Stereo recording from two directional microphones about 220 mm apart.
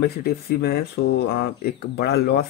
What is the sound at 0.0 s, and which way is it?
Speech, 45° left (ahead or behind).